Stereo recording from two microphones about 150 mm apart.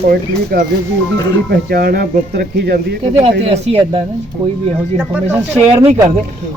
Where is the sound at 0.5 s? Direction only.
85° right.